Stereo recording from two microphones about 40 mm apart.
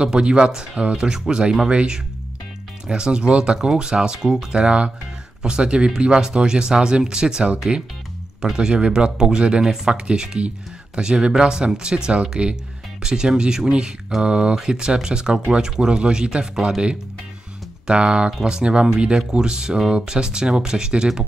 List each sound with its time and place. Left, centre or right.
0.0 s speech: right
8.5 s speech: right
17.8 s speech: right